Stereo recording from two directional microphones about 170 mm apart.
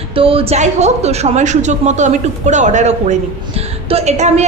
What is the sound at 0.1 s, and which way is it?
A woman's voice, 35° right (ahead or behind).